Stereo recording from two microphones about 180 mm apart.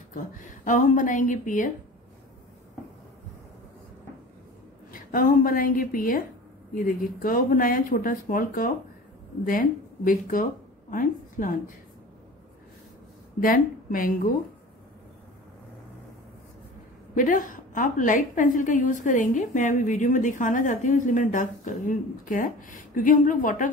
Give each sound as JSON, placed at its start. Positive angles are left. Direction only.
{"t": 0.7, "sound": "a woman's voice", "side_deg": 45}
{"t": 4.9, "sound": "a woman's voice", "side_deg": 50}
{"t": 13.4, "sound": "a woman's voice", "side_deg": 50}
{"t": 17.1, "sound": "a woman's voice", "side_deg": 50}